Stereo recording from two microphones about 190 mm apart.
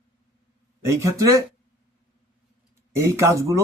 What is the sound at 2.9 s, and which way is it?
Speech, 15° right (ahead or behind).